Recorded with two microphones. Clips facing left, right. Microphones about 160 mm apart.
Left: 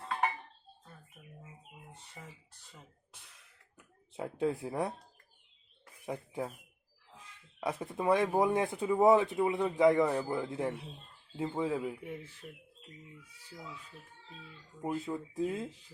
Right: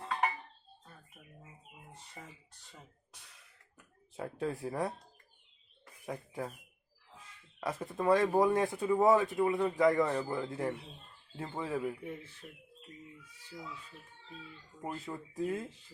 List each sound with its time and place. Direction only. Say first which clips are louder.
4.1 s speech: left 4 dB; 20° left (ahead or behind)
6.1 s speech: left 2 dB; 15° left (ahead or behind)
7.6 s speech: even; 15° left (ahead or behind)
14.8 s speech: left 5 dB; 10° left (ahead or behind)